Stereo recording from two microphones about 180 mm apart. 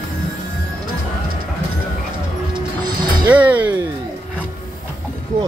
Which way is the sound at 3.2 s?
10° right (ahead or behind).